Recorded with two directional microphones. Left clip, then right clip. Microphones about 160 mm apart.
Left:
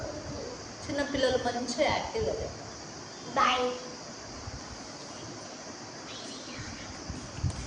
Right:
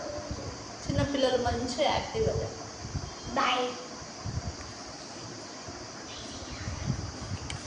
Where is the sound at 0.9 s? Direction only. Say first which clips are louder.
Even; centre (ahead or behind).